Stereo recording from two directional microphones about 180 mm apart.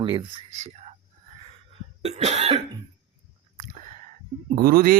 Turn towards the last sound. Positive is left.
turn(degrees=-55)  # may be behind; listen again after turning